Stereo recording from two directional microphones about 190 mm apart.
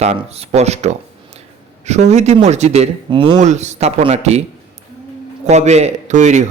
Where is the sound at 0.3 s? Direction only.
35° right (ahead or behind).